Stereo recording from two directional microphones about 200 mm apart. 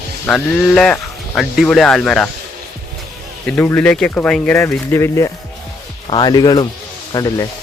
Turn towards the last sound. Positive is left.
turn(degrees=20)  # may be behind; listen again after turning